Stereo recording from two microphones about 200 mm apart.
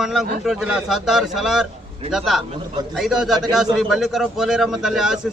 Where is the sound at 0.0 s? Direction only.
Centre (ahead or behind).